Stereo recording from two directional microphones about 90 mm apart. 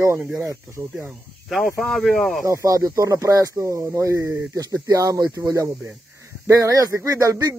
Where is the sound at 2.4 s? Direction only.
40° right (ahead or behind).